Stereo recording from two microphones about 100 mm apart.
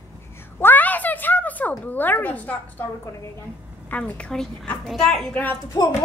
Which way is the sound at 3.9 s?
15° left (ahead or behind).